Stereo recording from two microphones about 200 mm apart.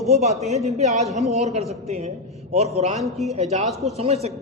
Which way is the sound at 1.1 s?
Centre (ahead or behind).